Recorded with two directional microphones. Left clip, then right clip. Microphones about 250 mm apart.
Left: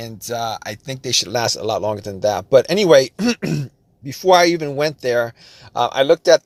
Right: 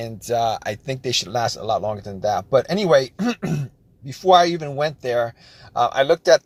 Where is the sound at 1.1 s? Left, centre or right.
Left.